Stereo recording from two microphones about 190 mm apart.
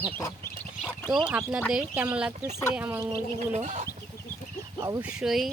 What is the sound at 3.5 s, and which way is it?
Chicken, 35° right (ahead or behind).